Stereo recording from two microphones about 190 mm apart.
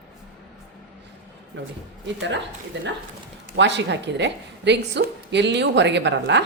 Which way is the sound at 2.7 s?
65° right (ahead or behind).